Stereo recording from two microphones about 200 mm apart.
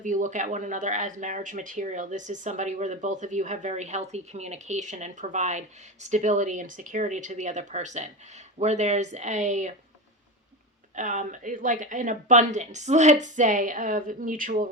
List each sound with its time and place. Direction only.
0.0 s speech: 40° right (ahead or behind)
10.9 s speech: 40° right (ahead or behind)